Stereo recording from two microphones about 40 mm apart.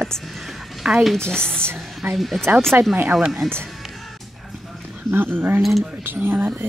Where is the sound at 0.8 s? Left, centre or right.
Right.